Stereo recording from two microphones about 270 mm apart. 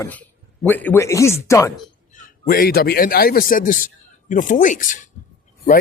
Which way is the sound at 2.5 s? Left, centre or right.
Left.